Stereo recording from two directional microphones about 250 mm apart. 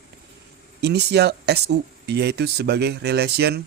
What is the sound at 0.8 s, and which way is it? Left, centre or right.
Speech, right.